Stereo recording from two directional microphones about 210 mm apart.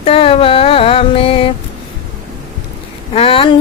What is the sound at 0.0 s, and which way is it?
Mantra, 25° left (ahead or behind).